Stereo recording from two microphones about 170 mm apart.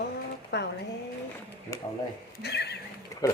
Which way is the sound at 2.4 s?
80° left.